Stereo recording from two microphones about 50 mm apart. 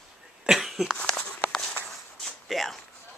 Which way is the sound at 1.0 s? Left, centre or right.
Centre.